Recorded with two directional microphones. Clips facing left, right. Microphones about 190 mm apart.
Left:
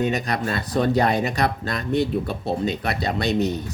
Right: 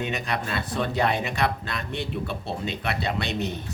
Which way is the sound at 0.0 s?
40° left (ahead or behind).